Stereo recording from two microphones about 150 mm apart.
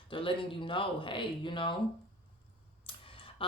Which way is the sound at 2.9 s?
35° left (ahead or behind).